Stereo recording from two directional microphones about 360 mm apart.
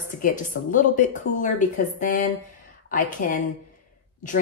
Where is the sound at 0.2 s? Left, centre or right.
Left.